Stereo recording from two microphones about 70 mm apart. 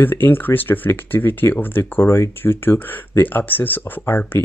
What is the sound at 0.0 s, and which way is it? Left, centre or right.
Speech, left.